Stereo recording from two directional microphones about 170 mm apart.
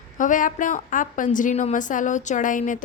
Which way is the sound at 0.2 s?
50° left (ahead or behind).